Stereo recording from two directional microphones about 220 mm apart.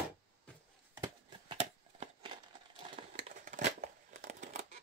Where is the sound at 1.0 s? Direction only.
25° right (ahead or behind).